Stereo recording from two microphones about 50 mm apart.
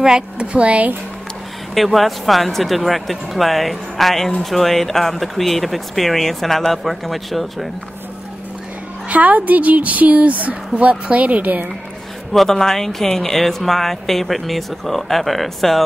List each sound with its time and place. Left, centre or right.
0.0 s speech: centre
1.8 s speech: centre
9.1 s speech: right
12.3 s speech: centre